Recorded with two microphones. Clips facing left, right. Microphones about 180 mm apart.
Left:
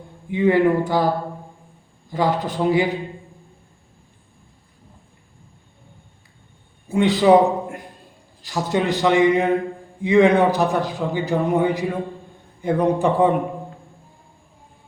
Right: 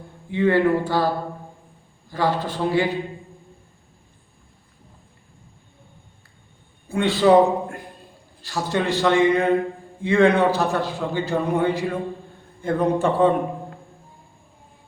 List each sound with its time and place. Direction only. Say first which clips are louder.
0.3 s a man's voice: left 2 dB; 15° left (ahead or behind)
2.0 s a man's voice: left 2 dB; 20° left (ahead or behind)
6.8 s a man's voice: left 2 dB; 20° left (ahead or behind)